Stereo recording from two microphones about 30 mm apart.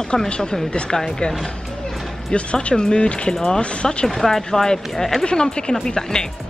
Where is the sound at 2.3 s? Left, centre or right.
Left.